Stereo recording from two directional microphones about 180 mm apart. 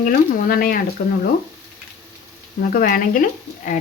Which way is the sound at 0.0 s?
50° left (ahead or behind).